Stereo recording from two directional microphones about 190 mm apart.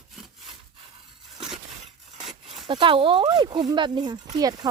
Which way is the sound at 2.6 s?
25° right (ahead or behind).